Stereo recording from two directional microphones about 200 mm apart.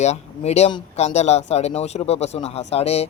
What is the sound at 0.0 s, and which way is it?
Speech, 35° left (ahead or behind).